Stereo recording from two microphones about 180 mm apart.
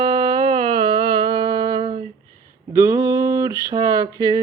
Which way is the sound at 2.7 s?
15° right (ahead or behind).